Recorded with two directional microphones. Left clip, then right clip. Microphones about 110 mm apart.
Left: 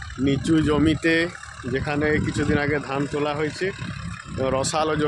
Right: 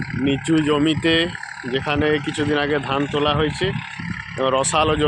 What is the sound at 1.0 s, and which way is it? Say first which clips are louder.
Speech: right 3 dB; 5° left (ahead or behind).